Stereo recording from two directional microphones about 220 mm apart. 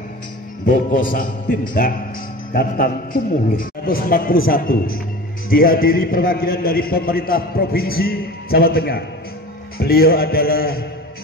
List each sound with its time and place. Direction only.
0.7 s a man's voice: 40° left (ahead or behind)